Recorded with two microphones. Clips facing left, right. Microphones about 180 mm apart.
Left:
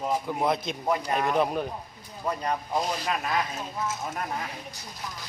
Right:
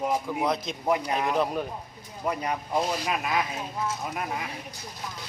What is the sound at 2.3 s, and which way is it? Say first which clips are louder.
Speech: even; 10° right (ahead or behind).